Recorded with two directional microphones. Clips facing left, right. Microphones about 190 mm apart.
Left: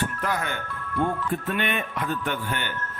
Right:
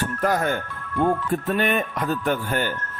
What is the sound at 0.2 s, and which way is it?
Speech, 45° right (ahead or behind).